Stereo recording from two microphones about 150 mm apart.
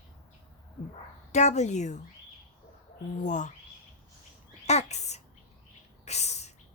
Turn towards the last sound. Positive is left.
turn(degrees=45)  # may be behind; listen again after turning